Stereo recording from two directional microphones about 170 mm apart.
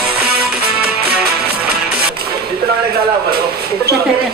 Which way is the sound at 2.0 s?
65° right (ahead or behind).